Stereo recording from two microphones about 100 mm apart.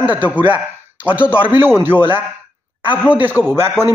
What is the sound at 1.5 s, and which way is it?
A man's voice, 20° right (ahead or behind).